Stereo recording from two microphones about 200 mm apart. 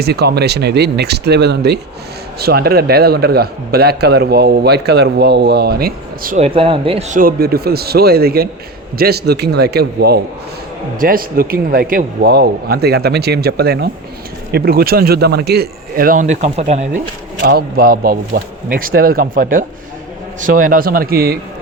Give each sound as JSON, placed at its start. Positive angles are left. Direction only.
{"t": 0.0, "sound": "a man's voice", "side_deg": -55}
{"t": 6.3, "sound": "speech", "side_deg": -30}
{"t": 7.2, "sound": "a man's voice", "side_deg": -45}
{"t": 17.4, "sound": "a man's voice", "side_deg": -50}